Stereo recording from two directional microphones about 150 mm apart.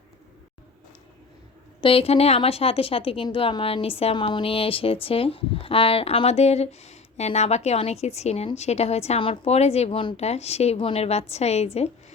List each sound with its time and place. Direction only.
1.8 s a woman's voice: 40° left (ahead or behind)